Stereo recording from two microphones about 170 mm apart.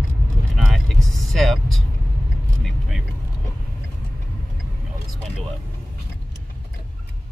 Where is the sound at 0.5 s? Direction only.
Centre (ahead or behind).